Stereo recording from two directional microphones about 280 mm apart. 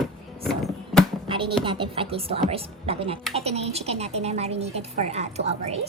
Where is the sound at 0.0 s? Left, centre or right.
Centre.